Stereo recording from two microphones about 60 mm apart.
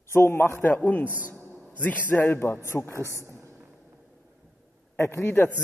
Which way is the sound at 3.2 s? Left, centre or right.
Right.